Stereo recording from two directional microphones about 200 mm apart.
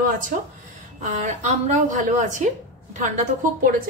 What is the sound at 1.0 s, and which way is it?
A woman's voice, 35° right (ahead or behind).